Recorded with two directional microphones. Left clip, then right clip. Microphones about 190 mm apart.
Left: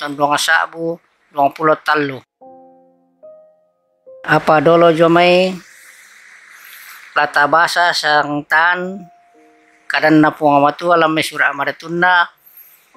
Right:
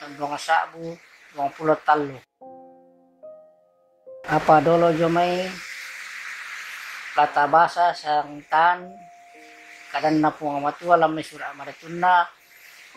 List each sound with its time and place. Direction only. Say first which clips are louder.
0.2 s speech: left 9 dB; 40° left (ahead or behind)
2.4 s music: left 3 dB; centre (ahead or behind)
4.2 s speech: left 5 dB; 40° left (ahead or behind)
7.2 s speech: left 5 dB; 35° left (ahead or behind)
9.8 s speech: left 9 dB; 35° left (ahead or behind)